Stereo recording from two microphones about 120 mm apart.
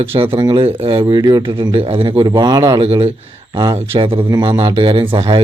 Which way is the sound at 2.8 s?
50° right (ahead or behind).